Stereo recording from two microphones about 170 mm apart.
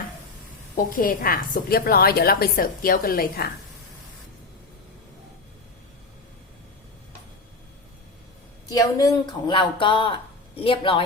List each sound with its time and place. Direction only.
0.9 s a woman's voice: 55° left (ahead or behind)
8.7 s speech: 20° left (ahead or behind)